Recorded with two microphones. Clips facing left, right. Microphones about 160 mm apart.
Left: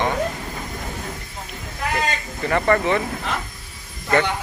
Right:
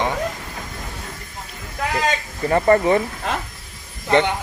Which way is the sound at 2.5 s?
35° right (ahead or behind).